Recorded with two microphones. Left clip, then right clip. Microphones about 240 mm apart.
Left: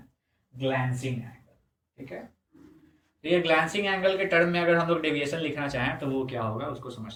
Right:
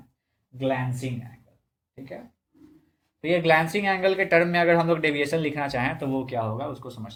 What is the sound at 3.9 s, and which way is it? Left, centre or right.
Speech, right.